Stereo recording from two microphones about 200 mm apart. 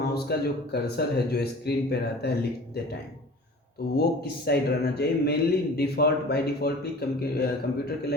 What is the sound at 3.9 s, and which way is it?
Speech, 50° left (ahead or behind).